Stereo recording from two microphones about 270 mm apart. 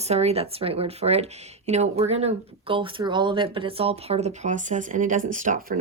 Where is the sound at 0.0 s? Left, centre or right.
Right.